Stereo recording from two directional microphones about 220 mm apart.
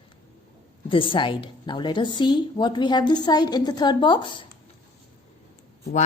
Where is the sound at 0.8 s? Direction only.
25° left (ahead or behind).